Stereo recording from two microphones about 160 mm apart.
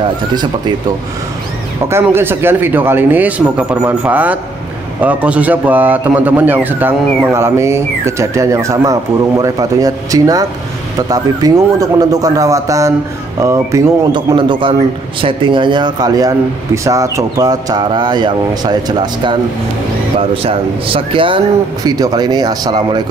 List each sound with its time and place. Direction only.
1.9 s a man's voice: 15° right (ahead or behind)
14.3 s speech: 30° right (ahead or behind)